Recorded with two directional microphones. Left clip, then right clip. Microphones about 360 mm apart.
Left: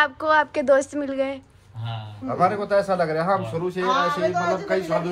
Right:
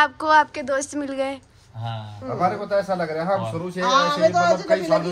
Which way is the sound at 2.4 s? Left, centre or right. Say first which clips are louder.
Left 2 dB; left.